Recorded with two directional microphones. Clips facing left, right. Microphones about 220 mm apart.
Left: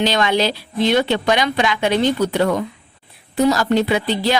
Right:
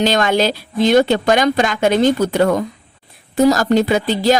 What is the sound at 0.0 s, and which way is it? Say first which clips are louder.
Speech: right 2 dB; 45° right (ahead or behind).